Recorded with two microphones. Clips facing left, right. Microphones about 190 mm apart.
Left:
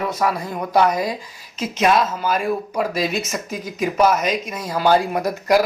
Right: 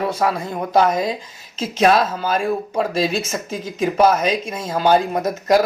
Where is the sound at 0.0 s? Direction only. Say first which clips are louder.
Right 1 dB; 30° right (ahead or behind).